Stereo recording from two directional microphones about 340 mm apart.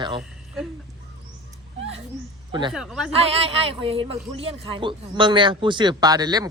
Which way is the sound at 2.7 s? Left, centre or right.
Centre.